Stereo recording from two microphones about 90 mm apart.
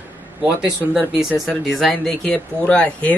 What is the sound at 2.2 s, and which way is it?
Speech, 10° left (ahead or behind).